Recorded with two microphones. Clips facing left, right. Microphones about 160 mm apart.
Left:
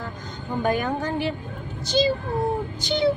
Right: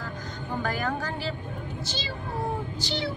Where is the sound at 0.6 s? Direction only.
20° left (ahead or behind).